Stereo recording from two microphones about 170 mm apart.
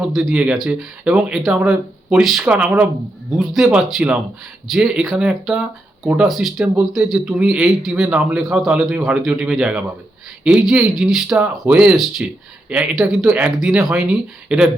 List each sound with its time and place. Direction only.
0.0 s speech: centre (ahead or behind)